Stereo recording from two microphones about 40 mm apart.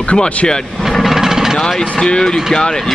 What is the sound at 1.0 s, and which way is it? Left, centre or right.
Jackhammer, centre.